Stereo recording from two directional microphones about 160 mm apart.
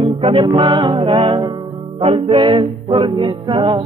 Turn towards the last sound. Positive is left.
turn(degrees=-25)  # may be behind; listen again after turning